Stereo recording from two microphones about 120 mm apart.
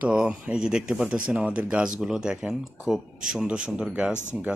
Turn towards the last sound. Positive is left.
turn(degrees=20)  # may be behind; listen again after turning